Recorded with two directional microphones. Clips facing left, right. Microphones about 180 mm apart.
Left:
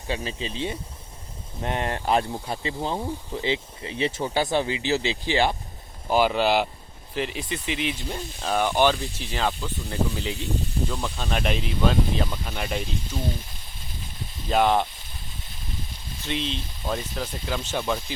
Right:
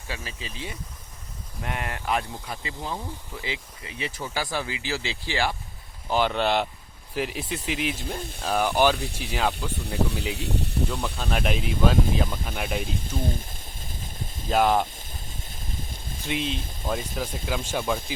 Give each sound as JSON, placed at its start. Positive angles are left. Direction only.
{"t": 0.1, "sound": "speech", "side_deg": 30}
{"t": 6.1, "sound": "speech", "side_deg": 10}
{"t": 9.8, "sound": "speech", "side_deg": -70}
{"t": 11.2, "sound": "speech", "side_deg": -5}
{"t": 13.1, "sound": "a sound", "side_deg": -50}
{"t": 14.5, "sound": "speech", "side_deg": -5}
{"t": 15.4, "sound": "a sound", "side_deg": -45}
{"t": 16.2, "sound": "speech", "side_deg": -10}